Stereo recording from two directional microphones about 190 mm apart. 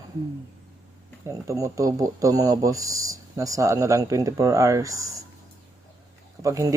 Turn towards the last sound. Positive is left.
turn(degrees=-15)  # may be behind; listen again after turning